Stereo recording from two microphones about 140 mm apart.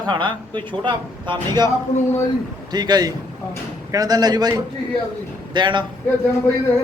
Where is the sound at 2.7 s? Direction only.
30° right (ahead or behind).